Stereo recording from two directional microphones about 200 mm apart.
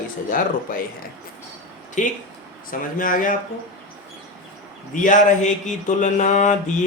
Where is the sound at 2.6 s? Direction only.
45° left (ahead or behind).